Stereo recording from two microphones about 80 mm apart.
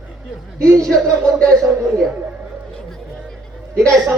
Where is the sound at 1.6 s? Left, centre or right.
Centre.